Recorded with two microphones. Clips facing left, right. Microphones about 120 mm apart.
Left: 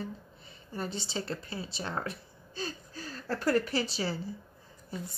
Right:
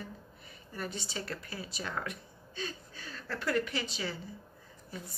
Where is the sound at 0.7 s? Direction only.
30° left (ahead or behind).